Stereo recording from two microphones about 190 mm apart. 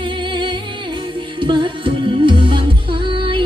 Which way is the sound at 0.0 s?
25° right (ahead or behind).